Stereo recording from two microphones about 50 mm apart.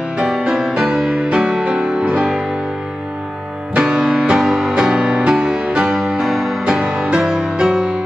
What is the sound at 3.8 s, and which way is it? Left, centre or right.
Music, centre.